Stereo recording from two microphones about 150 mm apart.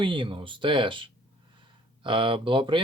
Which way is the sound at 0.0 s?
35° right (ahead or behind).